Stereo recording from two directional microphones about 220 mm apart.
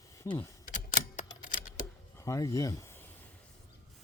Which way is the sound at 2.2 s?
15° left (ahead or behind).